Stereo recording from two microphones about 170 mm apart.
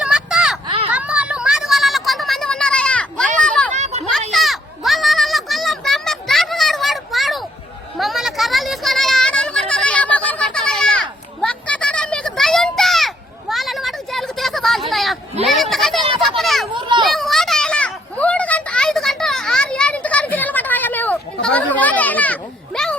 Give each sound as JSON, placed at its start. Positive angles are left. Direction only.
{"t": 0.0, "sound": "a sound", "side_deg": -5}
{"t": 3.8, "sound": "children playing", "side_deg": -40}
{"t": 4.3, "sound": "children playing", "side_deg": 0}
{"t": 7.9, "sound": "a sound", "side_deg": 0}
{"t": 16.4, "sound": "children playing", "side_deg": 0}
{"t": 16.7, "sound": "children playing", "side_deg": -25}
{"t": 17.1, "sound": "children playing", "side_deg": 0}